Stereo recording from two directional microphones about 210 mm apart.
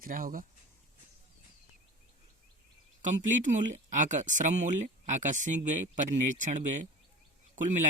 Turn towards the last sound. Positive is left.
turn(degrees=-35)  # may be behind; listen again after turning